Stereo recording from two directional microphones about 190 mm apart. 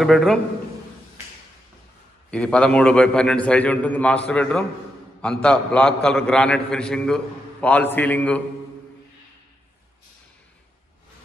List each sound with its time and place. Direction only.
0.0 s a man's voice: centre (ahead or behind)
2.3 s a man's voice: 5° left (ahead or behind)